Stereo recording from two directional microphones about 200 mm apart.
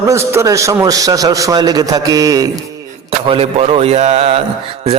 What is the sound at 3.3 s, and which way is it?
A man's voice, 30° right (ahead or behind).